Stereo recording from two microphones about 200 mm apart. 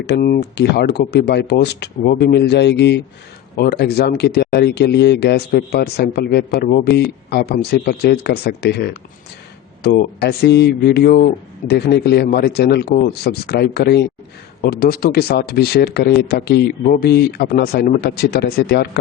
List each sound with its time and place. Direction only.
0.0 s speech: 55° left (ahead or behind)